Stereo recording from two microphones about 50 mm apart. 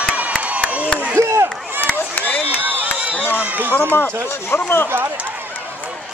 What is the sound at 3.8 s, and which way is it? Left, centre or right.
Speech, left.